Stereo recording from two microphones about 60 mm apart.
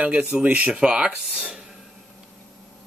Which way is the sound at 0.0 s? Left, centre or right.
Centre.